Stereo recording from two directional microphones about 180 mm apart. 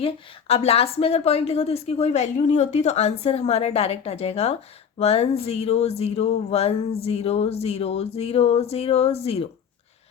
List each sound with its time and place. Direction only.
0.0 s a woman's voice: 35° left (ahead or behind)